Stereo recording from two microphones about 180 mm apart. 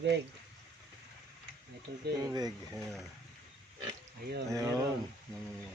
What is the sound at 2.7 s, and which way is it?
Speech, centre (ahead or behind).